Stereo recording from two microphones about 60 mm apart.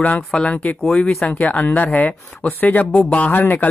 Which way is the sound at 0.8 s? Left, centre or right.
Centre.